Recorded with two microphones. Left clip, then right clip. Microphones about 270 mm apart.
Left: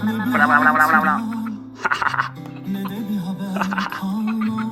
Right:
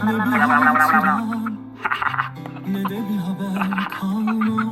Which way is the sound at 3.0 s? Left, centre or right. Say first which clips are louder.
Right 1 dB; right.